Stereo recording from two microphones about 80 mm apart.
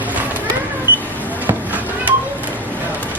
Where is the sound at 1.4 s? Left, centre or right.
Right.